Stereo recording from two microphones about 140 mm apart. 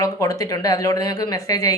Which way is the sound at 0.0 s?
25° left (ahead or behind).